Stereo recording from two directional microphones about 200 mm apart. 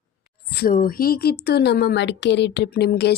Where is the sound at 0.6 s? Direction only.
45° left (ahead or behind).